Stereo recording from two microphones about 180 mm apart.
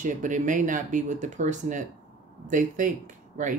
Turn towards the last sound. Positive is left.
turn(degrees=-45)  # may be behind; listen again after turning